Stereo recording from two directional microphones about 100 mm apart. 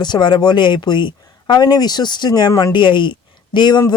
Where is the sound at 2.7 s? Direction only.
55° left (ahead or behind).